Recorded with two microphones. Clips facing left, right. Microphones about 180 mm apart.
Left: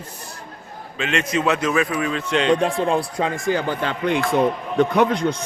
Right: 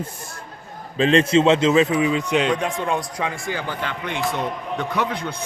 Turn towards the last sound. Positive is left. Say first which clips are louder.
# left 7 dB
turn(degrees=55)  # may be behind; listen again after turning